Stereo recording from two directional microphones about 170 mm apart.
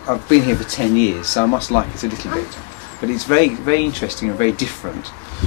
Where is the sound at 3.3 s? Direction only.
15° left (ahead or behind).